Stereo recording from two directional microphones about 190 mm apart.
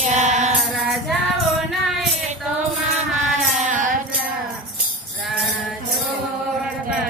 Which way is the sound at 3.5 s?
40° right (ahead or behind).